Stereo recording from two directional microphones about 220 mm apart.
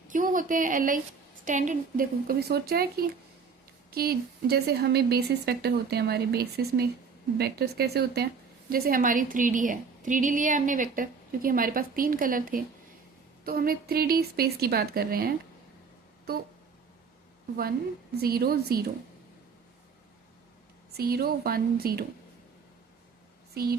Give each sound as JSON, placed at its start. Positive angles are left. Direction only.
{"t": 0.1, "sound": "a woman's voice", "side_deg": -35}
{"t": 3.9, "sound": "a woman's voice", "side_deg": -45}
{"t": 18.2, "sound": "speech", "side_deg": -45}
{"t": 20.9, "sound": "speech", "side_deg": -45}